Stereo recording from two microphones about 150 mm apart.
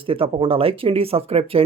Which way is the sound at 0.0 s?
35° right (ahead or behind).